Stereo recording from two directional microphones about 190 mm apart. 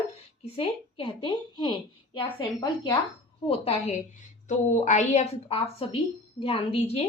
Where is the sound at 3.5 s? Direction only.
35° left (ahead or behind).